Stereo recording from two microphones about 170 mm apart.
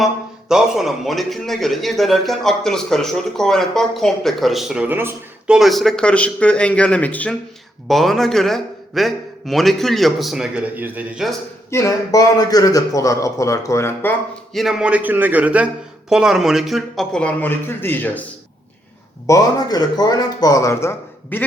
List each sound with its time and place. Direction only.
0.0 s a man's voice: 5° right (ahead or behind)
5.5 s a man's voice: centre (ahead or behind)
11.7 s a man's voice: 15° left (ahead or behind)
14.5 s a man's voice: centre (ahead or behind)
19.3 s speech: 20° left (ahead or behind)